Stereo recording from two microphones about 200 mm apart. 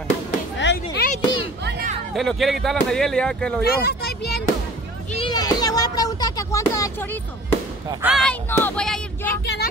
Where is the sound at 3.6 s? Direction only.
50° left (ahead or behind).